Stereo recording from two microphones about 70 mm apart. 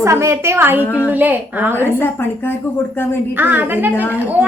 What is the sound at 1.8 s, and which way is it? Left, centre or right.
Speech, left.